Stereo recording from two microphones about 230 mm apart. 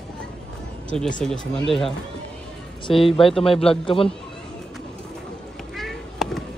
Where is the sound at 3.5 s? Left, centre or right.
Left.